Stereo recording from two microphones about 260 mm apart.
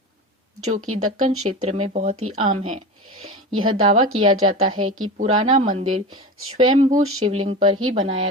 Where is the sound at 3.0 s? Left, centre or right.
Right.